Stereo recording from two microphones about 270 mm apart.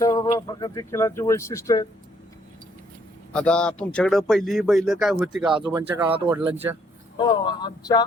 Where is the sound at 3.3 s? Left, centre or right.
Centre.